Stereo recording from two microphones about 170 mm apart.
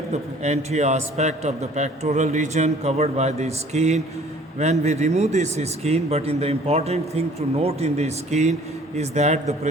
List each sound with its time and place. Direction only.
0.1 s speech: 40° right (ahead or behind)